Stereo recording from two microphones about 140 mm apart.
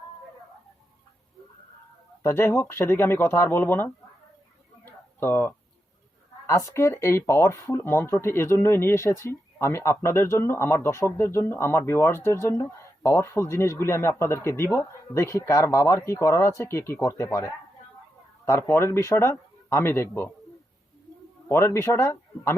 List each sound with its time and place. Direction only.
2.2 s speech: 20° left (ahead or behind)
4.9 s a sound: 15° left (ahead or behind)
6.5 s speech: 20° left (ahead or behind)
18.7 s speech: 20° left (ahead or behind)
21.5 s speech: 20° left (ahead or behind)